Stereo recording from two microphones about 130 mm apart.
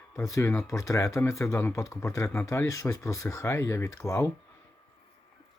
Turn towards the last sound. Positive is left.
turn(degrees=20)  # may be behind; listen again after turning